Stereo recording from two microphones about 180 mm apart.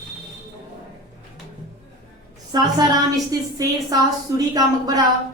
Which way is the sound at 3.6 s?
20° right (ahead or behind).